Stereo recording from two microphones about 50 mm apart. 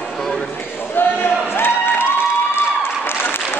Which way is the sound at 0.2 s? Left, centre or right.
Centre.